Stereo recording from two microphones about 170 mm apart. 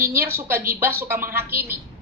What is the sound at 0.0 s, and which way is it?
A woman's voice, 15° right (ahead or behind).